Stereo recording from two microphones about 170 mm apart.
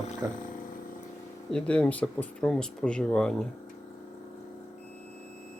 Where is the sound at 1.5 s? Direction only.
5° left (ahead or behind).